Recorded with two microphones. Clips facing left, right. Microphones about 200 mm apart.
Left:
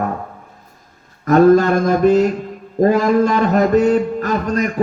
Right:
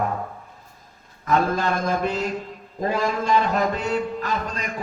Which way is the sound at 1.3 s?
45° left (ahead or behind).